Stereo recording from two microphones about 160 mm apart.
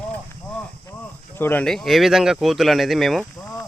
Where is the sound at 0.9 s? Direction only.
20° left (ahead or behind).